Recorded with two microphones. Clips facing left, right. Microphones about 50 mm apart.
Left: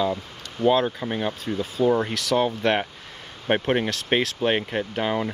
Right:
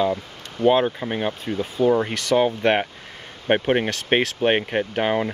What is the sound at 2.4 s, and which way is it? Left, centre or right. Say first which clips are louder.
Speech: right 3 dB; right.